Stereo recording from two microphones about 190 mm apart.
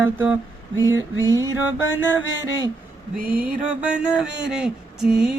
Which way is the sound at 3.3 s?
10° right (ahead or behind).